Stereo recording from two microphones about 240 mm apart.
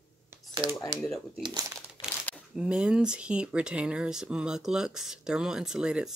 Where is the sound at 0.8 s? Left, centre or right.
Centre.